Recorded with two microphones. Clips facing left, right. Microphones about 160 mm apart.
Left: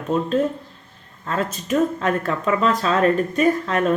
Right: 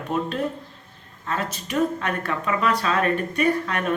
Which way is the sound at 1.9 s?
35° left (ahead or behind).